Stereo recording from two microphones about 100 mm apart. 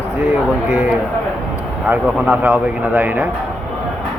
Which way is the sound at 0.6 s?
15° right (ahead or behind).